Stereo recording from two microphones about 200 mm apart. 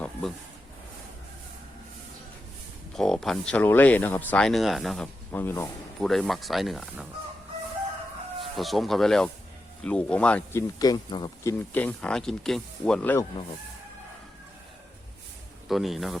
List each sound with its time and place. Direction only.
0.0 s a sound: centre (ahead or behind)
2.9 s speech: centre (ahead or behind)
6.1 s speech: centre (ahead or behind)
8.5 s speech: centre (ahead or behind)
10.8 s speech: 20° left (ahead or behind)
11.7 s speech: 10° left (ahead or behind)
15.7 s speech: centre (ahead or behind)